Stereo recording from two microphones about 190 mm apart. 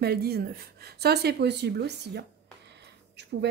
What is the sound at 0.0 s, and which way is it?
Speech, 55° right (ahead or behind).